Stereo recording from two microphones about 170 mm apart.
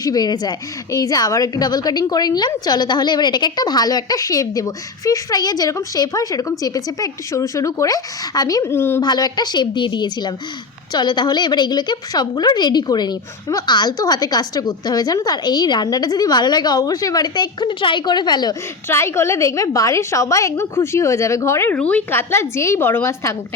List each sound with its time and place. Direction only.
0.0 s a woman's voice: 25° left (ahead or behind)
9.0 s a woman's voice: 25° left (ahead or behind)
18.9 s a woman's voice: 15° left (ahead or behind)